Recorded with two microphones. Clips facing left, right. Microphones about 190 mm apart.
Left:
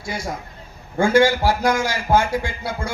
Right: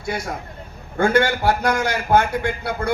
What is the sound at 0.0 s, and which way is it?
A man's voice, 60° right (ahead or behind).